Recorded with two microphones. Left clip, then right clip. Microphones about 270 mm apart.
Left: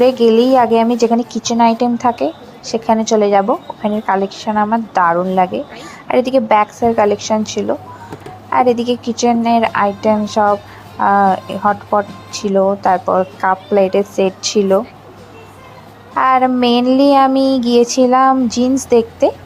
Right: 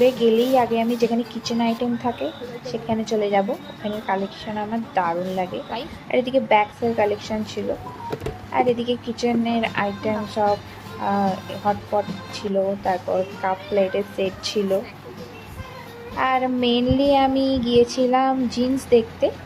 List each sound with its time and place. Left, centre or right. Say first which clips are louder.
0.0 s child singing: left 7 dB; centre
16.1 s child singing: left 9 dB; centre